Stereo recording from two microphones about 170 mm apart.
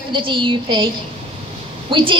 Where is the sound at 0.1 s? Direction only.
30° right (ahead or behind).